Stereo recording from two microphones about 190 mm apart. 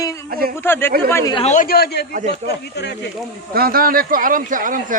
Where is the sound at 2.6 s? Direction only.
65° left (ahead or behind).